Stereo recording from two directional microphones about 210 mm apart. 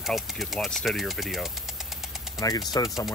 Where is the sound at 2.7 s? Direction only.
20° left (ahead or behind).